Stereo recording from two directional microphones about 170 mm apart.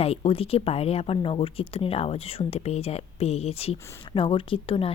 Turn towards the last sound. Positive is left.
turn(degrees=30)  # may be behind; listen again after turning